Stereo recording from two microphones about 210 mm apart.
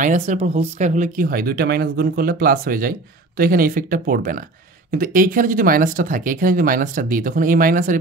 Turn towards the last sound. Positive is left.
turn(degrees=-40)  # may be behind; listen again after turning